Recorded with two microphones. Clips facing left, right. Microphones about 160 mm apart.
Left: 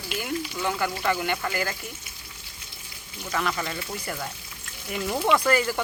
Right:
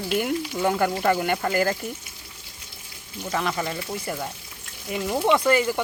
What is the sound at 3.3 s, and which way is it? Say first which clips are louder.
Speech: right 2 dB; 30° right (ahead or behind).